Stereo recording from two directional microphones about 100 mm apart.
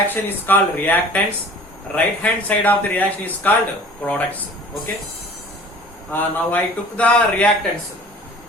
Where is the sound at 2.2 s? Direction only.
15° left (ahead or behind).